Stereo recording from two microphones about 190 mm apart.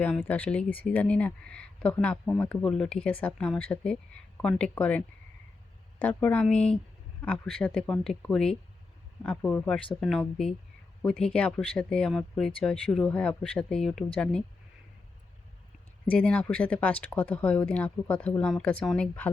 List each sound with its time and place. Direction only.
0.0 s speech: 10° left (ahead or behind)
16.0 s speech: 5° left (ahead or behind)